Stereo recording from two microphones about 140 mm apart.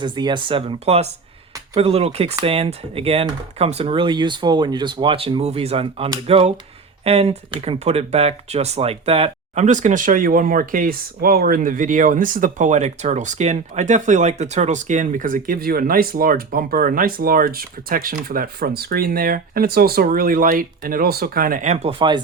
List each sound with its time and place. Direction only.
0.0 s speech: 35° right (ahead or behind)
9.6 s speech: 65° right (ahead or behind)
21.9 s speech: 35° right (ahead or behind)